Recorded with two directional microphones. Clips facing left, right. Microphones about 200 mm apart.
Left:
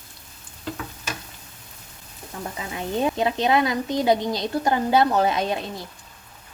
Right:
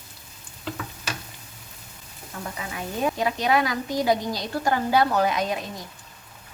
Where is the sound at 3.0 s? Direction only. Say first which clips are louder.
Left 1 dB; 25° left (ahead or behind).